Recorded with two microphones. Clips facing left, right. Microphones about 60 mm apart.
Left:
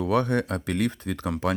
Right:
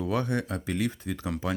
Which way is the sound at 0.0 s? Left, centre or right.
Left.